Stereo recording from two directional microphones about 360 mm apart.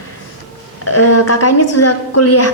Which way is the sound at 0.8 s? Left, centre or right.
Left.